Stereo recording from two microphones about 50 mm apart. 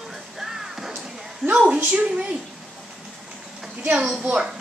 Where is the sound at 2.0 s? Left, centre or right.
Right.